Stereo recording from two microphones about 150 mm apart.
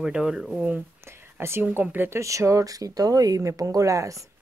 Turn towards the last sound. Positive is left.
turn(degrees=-20)  # may be behind; listen again after turning